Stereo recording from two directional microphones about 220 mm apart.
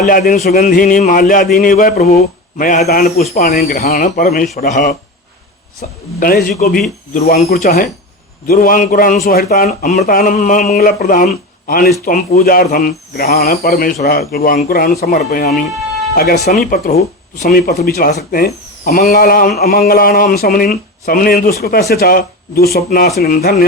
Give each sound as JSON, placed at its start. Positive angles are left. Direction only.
{"t": 0.0, "sound": "a man's voice", "side_deg": 40}